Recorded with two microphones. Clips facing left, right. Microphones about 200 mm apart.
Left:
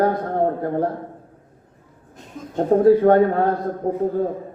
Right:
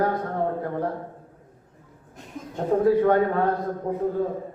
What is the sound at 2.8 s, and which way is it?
A man's voice, 35° left (ahead or behind).